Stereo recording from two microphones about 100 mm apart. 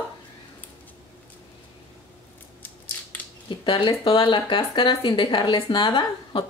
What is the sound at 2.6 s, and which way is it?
Scissors, 20° left (ahead or behind).